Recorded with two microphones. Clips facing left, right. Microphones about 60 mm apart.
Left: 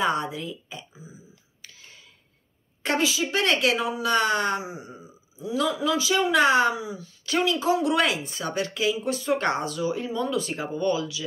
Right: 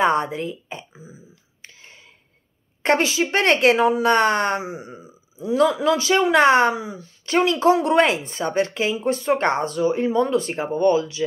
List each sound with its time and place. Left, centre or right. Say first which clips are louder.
0.0 s speech: right 6 dB; right
1.6 s whispering: right 4 dB; right
2.8 s speech: right 5 dB; right
7.5 s speech: right 7 dB; right
7.8 s speech: right 5 dB; right